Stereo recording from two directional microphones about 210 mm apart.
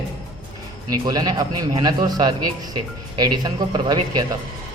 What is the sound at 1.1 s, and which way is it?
Speech, 20° right (ahead or behind).